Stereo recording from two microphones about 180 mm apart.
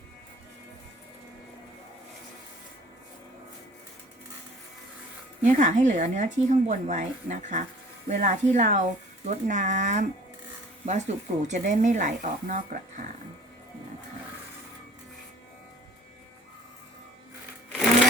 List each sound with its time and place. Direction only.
5.4 s speech: 45° right (ahead or behind)